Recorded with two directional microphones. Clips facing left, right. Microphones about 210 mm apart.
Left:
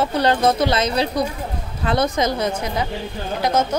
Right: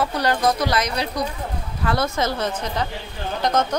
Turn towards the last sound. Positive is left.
turn(degrees=10)  # may be behind; listen again after turning